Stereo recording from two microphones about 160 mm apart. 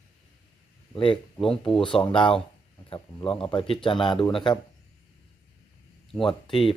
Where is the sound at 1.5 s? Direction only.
5° left (ahead or behind).